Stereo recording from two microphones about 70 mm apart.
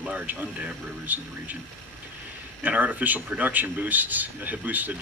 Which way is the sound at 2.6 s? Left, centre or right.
Right.